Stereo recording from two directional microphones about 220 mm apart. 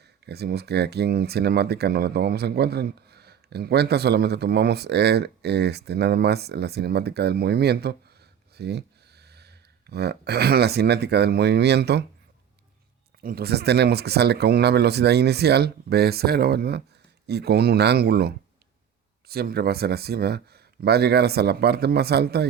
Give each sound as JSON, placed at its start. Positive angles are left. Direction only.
{"t": 0.0, "sound": "speech", "side_deg": -50}
{"t": 13.2, "sound": "speech", "side_deg": -45}